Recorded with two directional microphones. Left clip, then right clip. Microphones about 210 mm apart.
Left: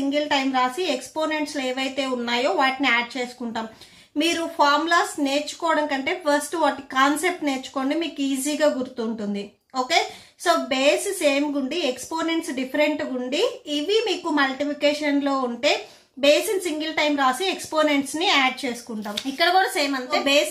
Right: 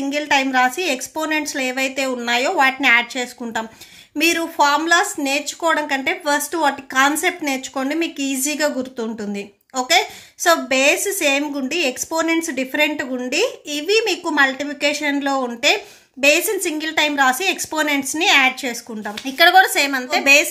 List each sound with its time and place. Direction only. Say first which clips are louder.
0.1 s speech: right 6 dB; 35° right (ahead or behind)